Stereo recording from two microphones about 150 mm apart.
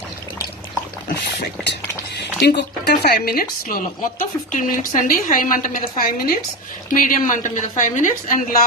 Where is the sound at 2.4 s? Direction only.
90° left; by 8.4 s 60° left (ahead or behind).